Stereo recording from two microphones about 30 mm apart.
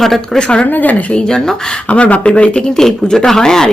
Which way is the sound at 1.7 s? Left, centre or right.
Left.